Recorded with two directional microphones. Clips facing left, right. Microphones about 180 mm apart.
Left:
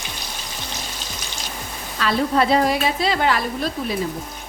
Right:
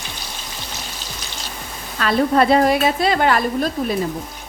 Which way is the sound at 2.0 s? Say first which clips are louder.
Right 3 dB; 50° right (ahead or behind).